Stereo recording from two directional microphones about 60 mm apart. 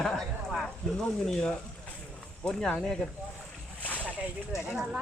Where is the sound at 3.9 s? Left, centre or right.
Left.